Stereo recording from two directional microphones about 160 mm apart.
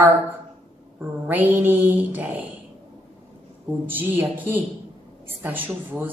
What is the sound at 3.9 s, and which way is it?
A woman's voice, 10° right (ahead or behind).